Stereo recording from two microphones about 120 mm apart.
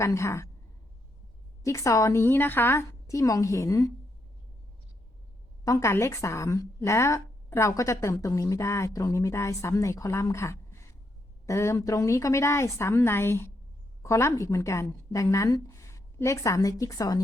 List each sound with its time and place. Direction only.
0.0 s a woman's voice: 25° left (ahead or behind)
1.6 s a woman's voice: 25° left (ahead or behind)
5.6 s a woman's voice: 25° left (ahead or behind)